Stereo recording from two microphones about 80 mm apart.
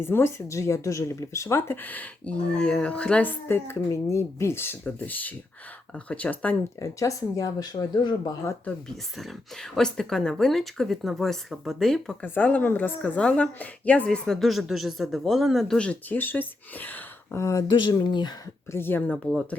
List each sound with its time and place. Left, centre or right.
0.0 s a woman's voice: left
6.7 s speech: left
9.1 s speech: centre
12.2 s a woman's voice: left; by 15.9 s centre
15.9 s speech: left
17.3 s speech: left
17.7 s speech: left
18.7 s speech: left
19.1 s a woman's voice: centre